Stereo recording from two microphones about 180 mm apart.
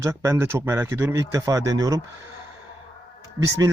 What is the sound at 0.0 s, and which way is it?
Speech, 15° right (ahead or behind).